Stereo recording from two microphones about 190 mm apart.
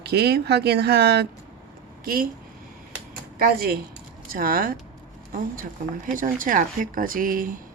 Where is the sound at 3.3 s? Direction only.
50° right (ahead or behind).